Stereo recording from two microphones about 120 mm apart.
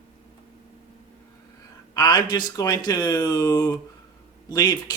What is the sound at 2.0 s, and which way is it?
Speech, 30° left (ahead or behind).